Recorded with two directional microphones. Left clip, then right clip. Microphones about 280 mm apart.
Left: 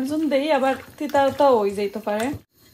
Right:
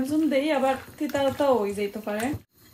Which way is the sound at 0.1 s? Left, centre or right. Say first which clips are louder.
Left 3 dB; left.